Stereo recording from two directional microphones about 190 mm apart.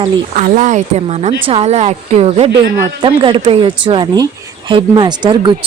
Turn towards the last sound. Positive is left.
turn(degrees=-25)  # may be behind; listen again after turning